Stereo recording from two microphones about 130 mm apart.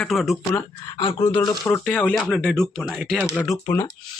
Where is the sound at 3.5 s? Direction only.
20° left (ahead or behind).